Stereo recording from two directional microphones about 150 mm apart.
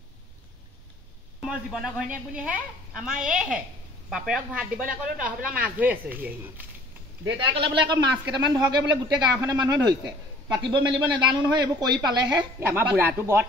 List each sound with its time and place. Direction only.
1.4 s a woman's voice: 5° right (ahead or behind)
4.8 s speech: 65° right (ahead or behind)
5.4 s speech: 10° right (ahead or behind)
7.5 s speech: 35° right (ahead or behind)
12.9 s speech: 15° right (ahead or behind)